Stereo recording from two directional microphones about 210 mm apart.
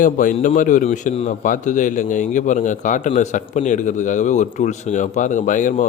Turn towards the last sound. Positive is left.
turn(degrees=35)  # may be behind; listen again after turning